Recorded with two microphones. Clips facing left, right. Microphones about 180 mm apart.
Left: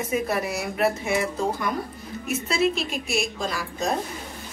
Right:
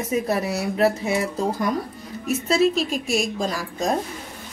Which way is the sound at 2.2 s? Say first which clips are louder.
Right 4 dB; 40° right (ahead or behind).